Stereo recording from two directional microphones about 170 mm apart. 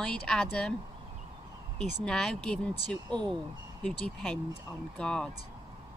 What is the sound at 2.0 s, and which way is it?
Speech, 5° left (ahead or behind).